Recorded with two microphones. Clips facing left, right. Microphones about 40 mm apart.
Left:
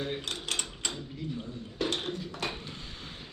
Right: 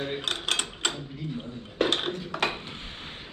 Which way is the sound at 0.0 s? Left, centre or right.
Right.